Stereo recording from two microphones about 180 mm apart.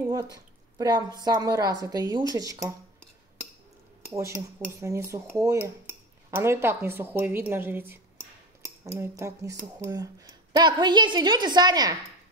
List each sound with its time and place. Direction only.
0.1 s speech: 20° right (ahead or behind)
4.1 s cutlery: 15° right (ahead or behind)
8.8 s speech: 15° right (ahead or behind)